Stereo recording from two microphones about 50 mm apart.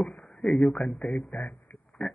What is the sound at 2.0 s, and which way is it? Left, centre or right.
Oink, left.